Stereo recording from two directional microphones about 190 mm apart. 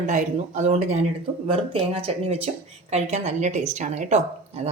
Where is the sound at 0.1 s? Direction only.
40° right (ahead or behind).